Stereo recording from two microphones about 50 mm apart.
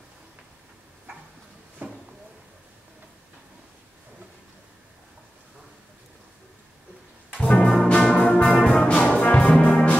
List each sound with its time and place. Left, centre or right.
1.8 s a sound: right
7.3 s music: centre
9.5 s brass instrument: left